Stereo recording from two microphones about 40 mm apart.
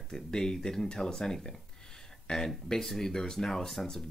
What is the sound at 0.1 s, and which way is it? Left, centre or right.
Speech, centre.